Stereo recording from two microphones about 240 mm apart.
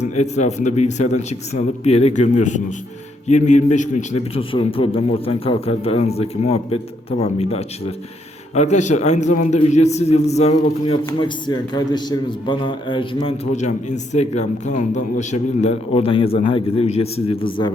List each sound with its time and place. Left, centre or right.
0.0 s a man's voice: left